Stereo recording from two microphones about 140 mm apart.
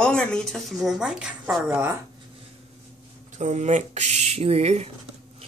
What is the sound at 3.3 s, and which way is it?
Speech, 55° right (ahead or behind).